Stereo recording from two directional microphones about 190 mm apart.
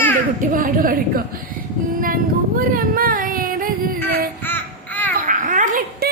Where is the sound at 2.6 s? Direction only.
50° right (ahead or behind).